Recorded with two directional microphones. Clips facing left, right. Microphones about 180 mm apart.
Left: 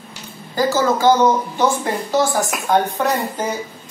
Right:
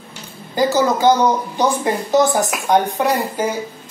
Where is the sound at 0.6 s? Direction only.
20° right (ahead or behind).